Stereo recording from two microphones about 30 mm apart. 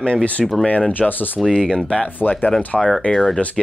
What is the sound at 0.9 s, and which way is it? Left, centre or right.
Speech, left.